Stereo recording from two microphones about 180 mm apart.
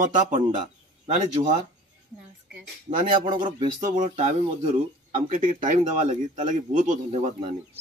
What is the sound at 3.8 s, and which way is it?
Speech, 45° right (ahead or behind).